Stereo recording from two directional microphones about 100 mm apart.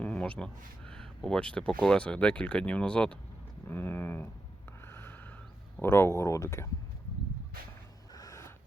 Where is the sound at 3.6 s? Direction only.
20° left (ahead or behind).